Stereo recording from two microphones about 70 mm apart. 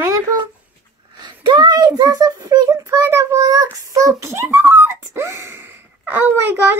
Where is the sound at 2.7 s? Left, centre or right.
Right.